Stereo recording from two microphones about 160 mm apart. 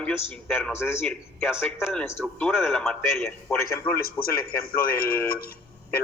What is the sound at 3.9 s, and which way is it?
Speech, 70° left (ahead or behind).